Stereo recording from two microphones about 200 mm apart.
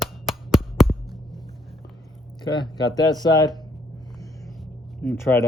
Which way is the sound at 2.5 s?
20° left (ahead or behind).